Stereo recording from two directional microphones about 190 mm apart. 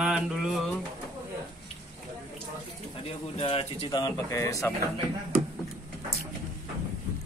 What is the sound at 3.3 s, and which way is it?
Speech, 30° left (ahead or behind).